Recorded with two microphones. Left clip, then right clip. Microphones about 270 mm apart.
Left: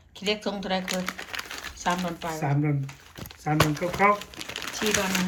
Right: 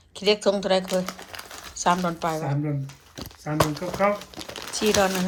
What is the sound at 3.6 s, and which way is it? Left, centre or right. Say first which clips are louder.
Speech: right 2 dB; centre.